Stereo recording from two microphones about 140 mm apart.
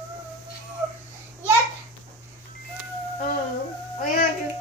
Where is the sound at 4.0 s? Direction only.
70° left (ahead or behind).